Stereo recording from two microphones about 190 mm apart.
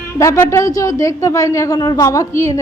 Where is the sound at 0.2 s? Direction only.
15° left (ahead or behind).